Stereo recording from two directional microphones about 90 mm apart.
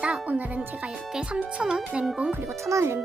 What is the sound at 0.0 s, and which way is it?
Speech, 15° right (ahead or behind).